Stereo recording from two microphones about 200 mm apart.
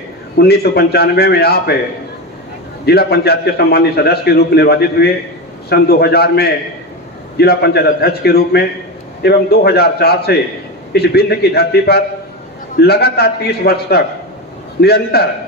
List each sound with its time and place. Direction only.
0.4 s a man's voice: 50° left (ahead or behind)
2.8 s a man's voice: 50° left (ahead or behind)